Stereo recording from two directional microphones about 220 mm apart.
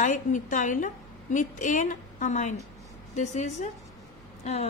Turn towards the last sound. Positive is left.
turn(degrees=30)  # may be behind; listen again after turning